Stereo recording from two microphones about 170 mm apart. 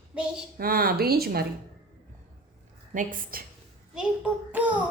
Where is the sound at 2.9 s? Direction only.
55° right (ahead or behind).